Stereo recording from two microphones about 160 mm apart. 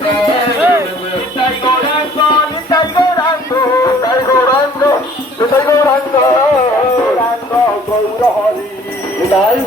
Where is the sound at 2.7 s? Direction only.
25° left (ahead or behind).